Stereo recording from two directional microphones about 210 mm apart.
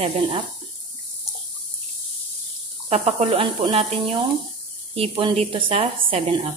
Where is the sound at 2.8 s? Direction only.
30° right (ahead or behind).